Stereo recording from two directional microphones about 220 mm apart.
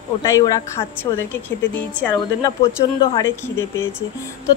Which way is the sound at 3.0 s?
15° left (ahead or behind).